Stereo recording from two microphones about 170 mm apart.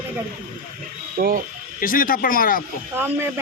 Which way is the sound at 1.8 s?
55° left (ahead or behind).